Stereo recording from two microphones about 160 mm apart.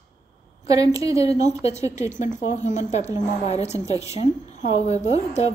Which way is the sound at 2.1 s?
50° left (ahead or behind).